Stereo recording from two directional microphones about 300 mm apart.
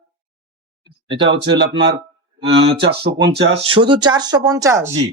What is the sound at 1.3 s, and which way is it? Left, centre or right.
Speech, right.